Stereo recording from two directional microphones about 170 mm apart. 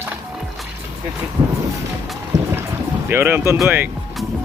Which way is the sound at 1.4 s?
25° right (ahead or behind).